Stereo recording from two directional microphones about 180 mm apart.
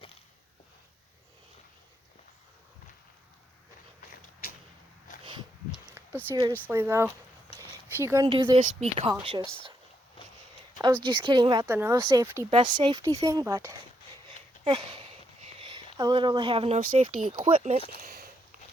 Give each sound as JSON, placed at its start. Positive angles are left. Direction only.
{"t": 4.1, "sound": "a sound", "side_deg": 55}
{"t": 5.2, "sound": "a sound", "side_deg": -25}
{"t": 5.9, "sound": "speech", "side_deg": -10}
{"t": 8.3, "sound": "a woman's voice", "side_deg": -30}
{"t": 11.0, "sound": "speech", "side_deg": -25}
{"t": 11.7, "sound": "speech", "side_deg": -10}
{"t": 12.5, "sound": "speech", "side_deg": -30}
{"t": 12.8, "sound": "speech", "side_deg": -20}
{"t": 14.6, "sound": "a sound", "side_deg": -35}
{"t": 17.3, "sound": "speech", "side_deg": -30}
{"t": 17.7, "sound": "speech", "side_deg": 35}